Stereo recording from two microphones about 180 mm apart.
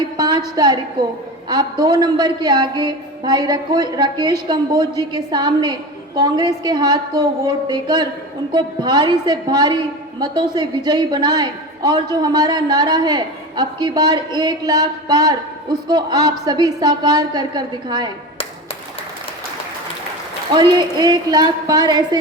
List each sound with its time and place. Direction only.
0.2 s a woman's voice: 25° right (ahead or behind)
20.5 s a man's voice: 25° right (ahead or behind)